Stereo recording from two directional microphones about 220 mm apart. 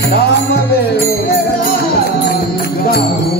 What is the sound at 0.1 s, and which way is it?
Music, 45° left (ahead or behind).